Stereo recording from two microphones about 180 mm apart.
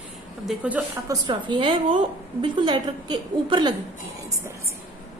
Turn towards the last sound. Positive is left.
turn(degrees=-25)  # may be behind; listen again after turning